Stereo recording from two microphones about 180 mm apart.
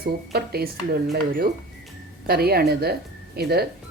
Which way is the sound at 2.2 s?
60° right (ahead or behind).